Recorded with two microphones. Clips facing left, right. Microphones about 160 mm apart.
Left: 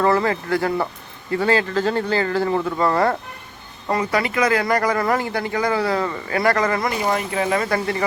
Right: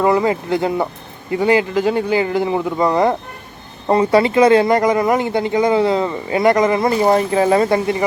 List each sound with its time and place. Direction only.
0.0 s speech: 15° right (ahead or behind)
3.8 s speech: 30° right (ahead or behind)